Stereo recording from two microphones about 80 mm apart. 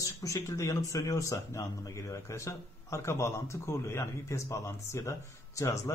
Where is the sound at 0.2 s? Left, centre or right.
Left.